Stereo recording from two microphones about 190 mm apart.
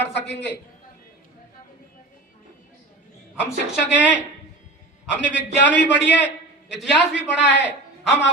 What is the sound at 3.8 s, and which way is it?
A man's voice, 70° left (ahead or behind).